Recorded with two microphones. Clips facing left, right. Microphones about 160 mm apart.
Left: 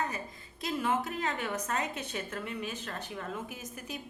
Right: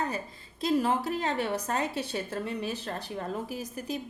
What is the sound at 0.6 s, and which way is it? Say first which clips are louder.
A woman's voice: right 5 dB; 35° right (ahead or behind).